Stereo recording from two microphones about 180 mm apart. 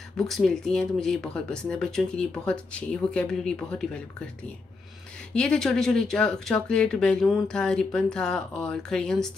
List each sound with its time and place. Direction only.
0.2 s speech: centre (ahead or behind)
5.3 s speech: 5° left (ahead or behind)